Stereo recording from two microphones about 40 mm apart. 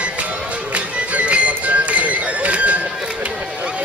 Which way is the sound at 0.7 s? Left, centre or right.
Right.